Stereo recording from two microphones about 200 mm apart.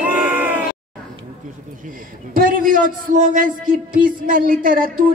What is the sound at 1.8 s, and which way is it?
A man's voice, 45° right (ahead or behind).